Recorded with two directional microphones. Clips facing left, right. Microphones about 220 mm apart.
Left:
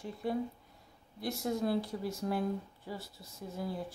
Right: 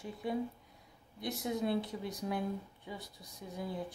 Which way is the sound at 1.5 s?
20° right (ahead or behind).